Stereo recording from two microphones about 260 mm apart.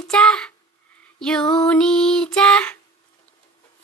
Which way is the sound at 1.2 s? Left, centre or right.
Centre.